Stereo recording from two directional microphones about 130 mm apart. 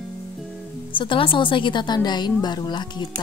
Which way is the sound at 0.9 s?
40° left (ahead or behind).